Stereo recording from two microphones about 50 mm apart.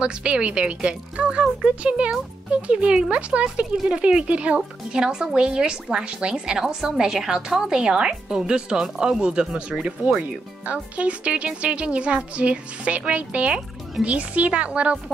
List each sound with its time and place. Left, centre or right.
0.0 s speech: right